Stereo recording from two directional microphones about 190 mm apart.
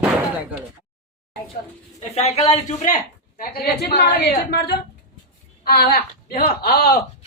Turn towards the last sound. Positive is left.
turn(degrees=55)  # may be behind; listen again after turning